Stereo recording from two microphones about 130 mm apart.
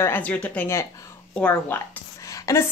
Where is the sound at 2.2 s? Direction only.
25° left (ahead or behind).